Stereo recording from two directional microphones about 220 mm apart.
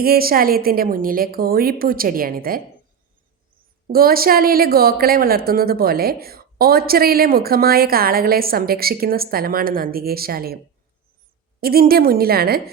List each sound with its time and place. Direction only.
0.0 s a woman's voice: 45° right (ahead or behind)
3.8 s a woman's voice: 40° right (ahead or behind)
11.6 s a woman's voice: 45° right (ahead or behind)